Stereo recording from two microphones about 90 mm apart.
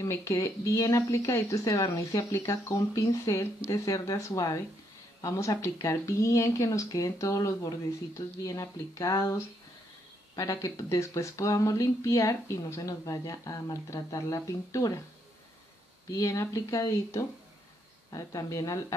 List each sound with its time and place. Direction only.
0.0 s speech: 30° left (ahead or behind)
16.1 s speech: 35° left (ahead or behind)